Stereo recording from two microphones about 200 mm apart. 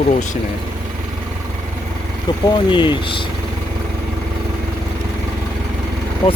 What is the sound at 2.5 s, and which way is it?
Speech, 25° left (ahead or behind).